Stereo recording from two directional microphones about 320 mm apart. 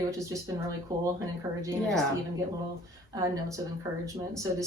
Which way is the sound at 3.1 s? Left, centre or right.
Centre.